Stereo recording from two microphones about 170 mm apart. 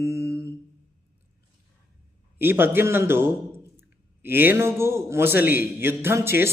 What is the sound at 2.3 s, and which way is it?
A man's voice, 15° right (ahead or behind).